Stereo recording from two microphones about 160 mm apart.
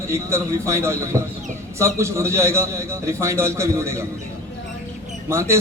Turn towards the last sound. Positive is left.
turn(degrees=-15)  # may be behind; listen again after turning